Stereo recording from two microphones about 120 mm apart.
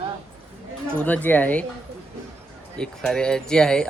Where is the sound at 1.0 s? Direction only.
10° left (ahead or behind).